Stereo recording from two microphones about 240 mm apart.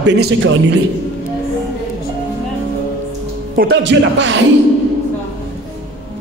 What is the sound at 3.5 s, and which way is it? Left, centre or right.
Speech, right.